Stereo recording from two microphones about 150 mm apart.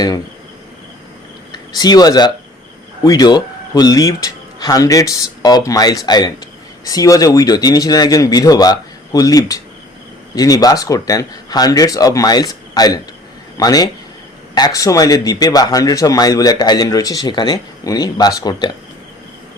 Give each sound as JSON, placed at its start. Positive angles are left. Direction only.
{"t": 1.5, "sound": "speech", "side_deg": 25}